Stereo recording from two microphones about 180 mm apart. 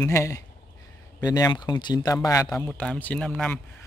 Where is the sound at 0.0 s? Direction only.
15° left (ahead or behind).